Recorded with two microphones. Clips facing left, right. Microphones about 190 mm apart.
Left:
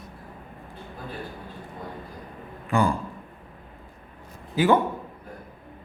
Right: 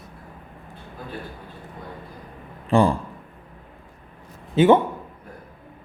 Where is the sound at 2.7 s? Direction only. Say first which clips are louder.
Right 5 dB; 30° right (ahead or behind).